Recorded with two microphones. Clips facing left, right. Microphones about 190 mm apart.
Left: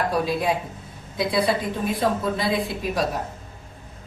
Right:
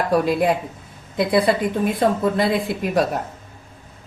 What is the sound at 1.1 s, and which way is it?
Speech, 55° right (ahead or behind).